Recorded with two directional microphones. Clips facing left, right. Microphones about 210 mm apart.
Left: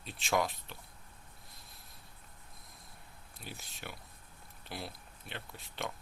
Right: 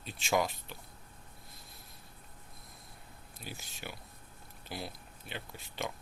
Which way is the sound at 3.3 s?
Centre (ahead or behind).